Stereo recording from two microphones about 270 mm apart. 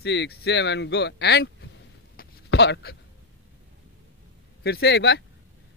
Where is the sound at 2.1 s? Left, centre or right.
Left.